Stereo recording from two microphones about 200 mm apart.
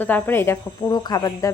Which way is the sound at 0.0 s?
10° left (ahead or behind).